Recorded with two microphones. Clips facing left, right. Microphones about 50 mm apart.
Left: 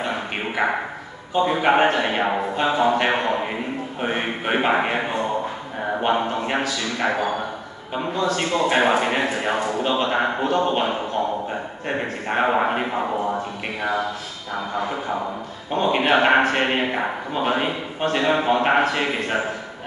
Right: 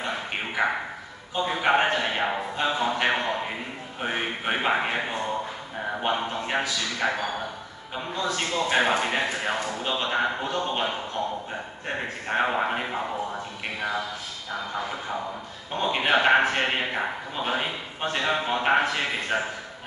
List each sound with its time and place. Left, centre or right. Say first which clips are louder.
0.6 s speech: left 3 dB; centre
1.3 s a man's voice: left 5 dB; centre
12.3 s a man's voice: left 5 dB; centre
15.7 s a man's voice: left 5 dB; centre